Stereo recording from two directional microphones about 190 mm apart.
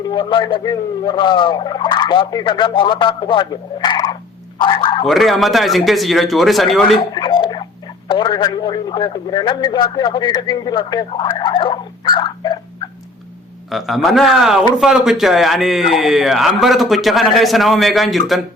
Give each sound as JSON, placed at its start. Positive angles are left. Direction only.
{"t": 0.1, "sound": "turkey", "side_deg": 25}
{"t": 5.0, "sound": "speech", "side_deg": 0}
{"t": 6.8, "sound": "speech", "side_deg": 25}
{"t": 13.7, "sound": "speech", "side_deg": 0}